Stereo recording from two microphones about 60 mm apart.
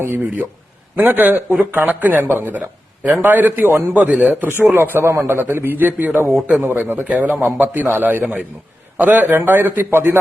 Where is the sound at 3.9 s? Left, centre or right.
Right.